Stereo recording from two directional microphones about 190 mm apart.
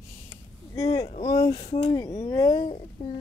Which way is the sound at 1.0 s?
40° left (ahead or behind).